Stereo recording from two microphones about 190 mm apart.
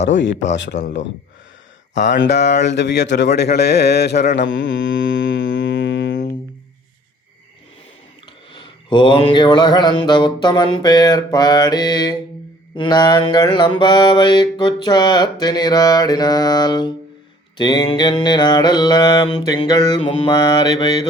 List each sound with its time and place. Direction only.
0.4 s speech: 70° left (ahead or behind)
2.0 s a man's voice: 65° left (ahead or behind)
8.5 s mantra: 25° left (ahead or behind)